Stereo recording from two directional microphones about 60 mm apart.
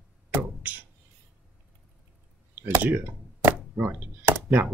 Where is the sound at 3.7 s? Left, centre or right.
Right.